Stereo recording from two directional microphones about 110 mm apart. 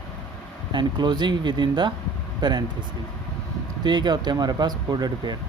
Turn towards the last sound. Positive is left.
turn(degrees=-40)  # may be behind; listen again after turning